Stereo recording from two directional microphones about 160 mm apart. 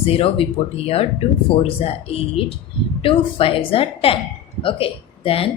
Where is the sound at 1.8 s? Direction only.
35° left (ahead or behind).